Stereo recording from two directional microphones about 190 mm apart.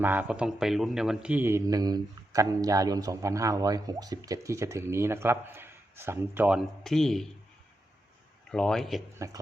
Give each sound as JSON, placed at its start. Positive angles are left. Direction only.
{"t": 0.0, "sound": "a man's voice", "side_deg": -10}
{"t": 6.8, "sound": "a man's voice", "side_deg": 0}
{"t": 8.4, "sound": "a man's voice", "side_deg": 5}
{"t": 9.1, "sound": "a man's voice", "side_deg": -15}